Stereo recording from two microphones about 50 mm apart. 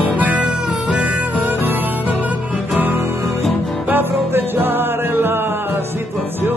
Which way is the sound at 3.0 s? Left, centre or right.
Right.